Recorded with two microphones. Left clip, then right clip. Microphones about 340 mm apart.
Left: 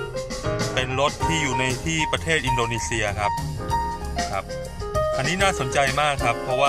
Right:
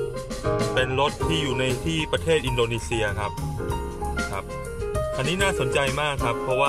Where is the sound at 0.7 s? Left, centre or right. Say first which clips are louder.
Left 2 dB; centre.